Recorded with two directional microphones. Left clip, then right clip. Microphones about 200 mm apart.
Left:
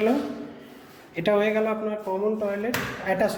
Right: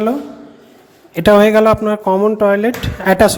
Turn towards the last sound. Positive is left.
turn(degrees=-45)  # may be behind; listen again after turning